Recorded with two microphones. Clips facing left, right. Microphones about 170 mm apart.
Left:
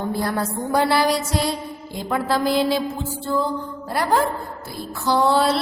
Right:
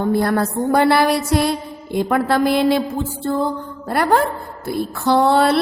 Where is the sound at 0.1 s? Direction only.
60° right (ahead or behind).